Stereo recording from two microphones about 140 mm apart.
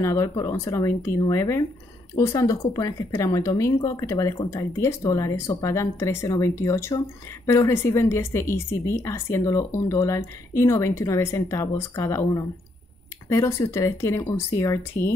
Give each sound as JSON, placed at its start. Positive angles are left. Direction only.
{"t": 0.0, "sound": "speech", "side_deg": 20}